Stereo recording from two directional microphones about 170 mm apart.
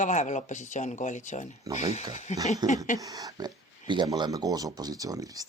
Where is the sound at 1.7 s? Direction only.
40° left (ahead or behind).